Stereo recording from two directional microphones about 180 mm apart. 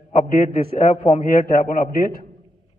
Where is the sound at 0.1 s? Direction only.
45° left (ahead or behind).